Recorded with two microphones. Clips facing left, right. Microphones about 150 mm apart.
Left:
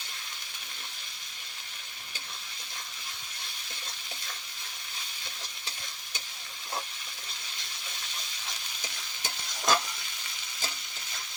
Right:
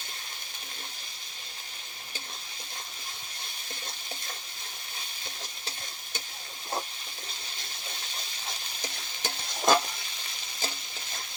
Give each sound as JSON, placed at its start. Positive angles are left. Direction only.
{"t": 8.4, "sound": "stir", "side_deg": -30}